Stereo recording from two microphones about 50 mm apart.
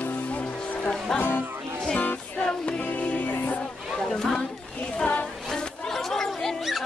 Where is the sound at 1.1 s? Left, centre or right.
Left.